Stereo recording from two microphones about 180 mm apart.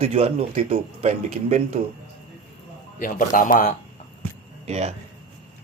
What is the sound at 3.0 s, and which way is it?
Speech, 50° left (ahead or behind).